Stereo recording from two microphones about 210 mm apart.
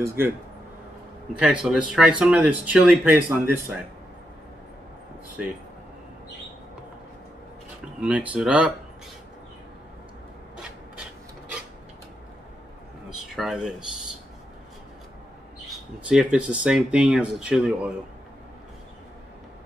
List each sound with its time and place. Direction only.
0.0 s speech: 10° right (ahead or behind)
1.4 s speech: 5° right (ahead or behind)
8.0 s speech: 5° right (ahead or behind)
13.4 s speech: centre (ahead or behind)
15.7 s speech: 5° right (ahead or behind)